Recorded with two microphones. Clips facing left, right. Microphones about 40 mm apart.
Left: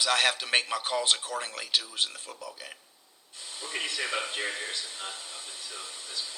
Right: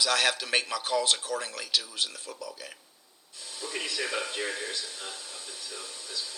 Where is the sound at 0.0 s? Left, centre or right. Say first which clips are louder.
Even; left.